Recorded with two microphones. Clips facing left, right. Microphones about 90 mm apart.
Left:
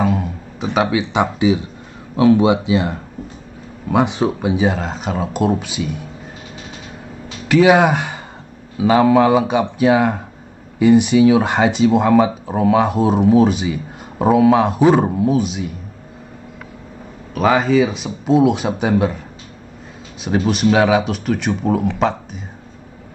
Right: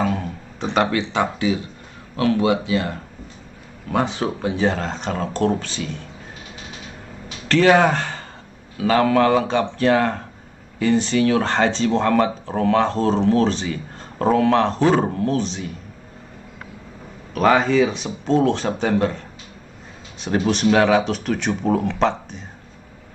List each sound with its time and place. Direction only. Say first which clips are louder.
0.0 s speech: left 4 dB; 5° left (ahead or behind)
7.4 s speech: left 3 dB; 10° left (ahead or behind)
17.3 s speech: left 2 dB; centre (ahead or behind)